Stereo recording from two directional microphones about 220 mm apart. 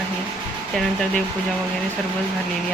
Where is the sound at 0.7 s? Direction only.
5° left (ahead or behind).